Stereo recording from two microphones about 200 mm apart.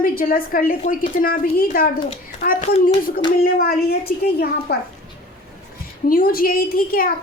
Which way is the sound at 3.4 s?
50° left (ahead or behind).